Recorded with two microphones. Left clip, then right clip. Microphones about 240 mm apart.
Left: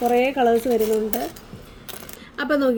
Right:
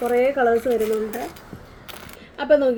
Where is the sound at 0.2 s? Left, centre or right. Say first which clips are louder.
Right 1 dB; left.